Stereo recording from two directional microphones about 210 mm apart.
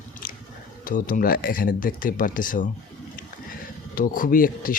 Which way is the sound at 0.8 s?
40° left (ahead or behind).